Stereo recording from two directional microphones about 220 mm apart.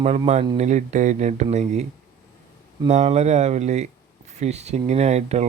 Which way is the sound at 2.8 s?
30° right (ahead or behind).